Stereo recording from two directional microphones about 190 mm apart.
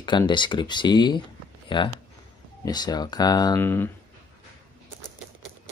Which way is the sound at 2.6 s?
20° left (ahead or behind).